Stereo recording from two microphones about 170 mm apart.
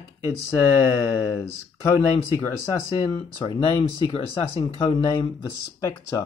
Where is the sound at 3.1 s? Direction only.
30° left (ahead or behind).